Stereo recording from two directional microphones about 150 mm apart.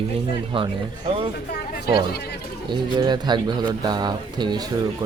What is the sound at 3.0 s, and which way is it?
Speech, 30° right (ahead or behind).